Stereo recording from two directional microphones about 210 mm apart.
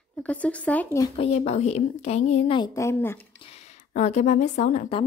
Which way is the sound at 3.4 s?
30° left (ahead or behind).